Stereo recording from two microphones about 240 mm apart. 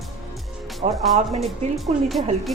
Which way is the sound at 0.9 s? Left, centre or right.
Centre.